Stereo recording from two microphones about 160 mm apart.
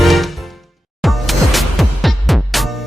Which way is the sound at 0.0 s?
Centre (ahead or behind).